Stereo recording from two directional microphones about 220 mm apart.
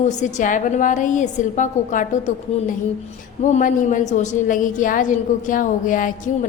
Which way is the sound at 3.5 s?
35° left (ahead or behind).